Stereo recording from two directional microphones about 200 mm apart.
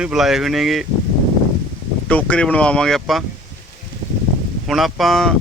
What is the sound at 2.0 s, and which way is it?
Speech, 5° left (ahead or behind).